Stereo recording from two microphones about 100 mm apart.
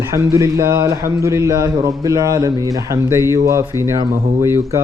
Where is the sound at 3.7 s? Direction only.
25° right (ahead or behind).